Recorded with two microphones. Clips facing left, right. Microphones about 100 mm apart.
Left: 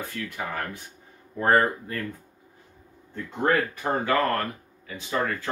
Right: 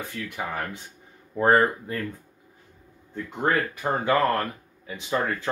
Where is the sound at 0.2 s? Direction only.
20° right (ahead or behind).